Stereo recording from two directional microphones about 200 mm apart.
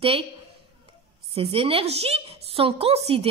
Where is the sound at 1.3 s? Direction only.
30° right (ahead or behind).